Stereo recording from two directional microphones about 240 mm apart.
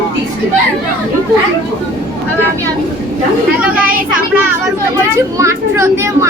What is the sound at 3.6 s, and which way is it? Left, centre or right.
Speech, centre.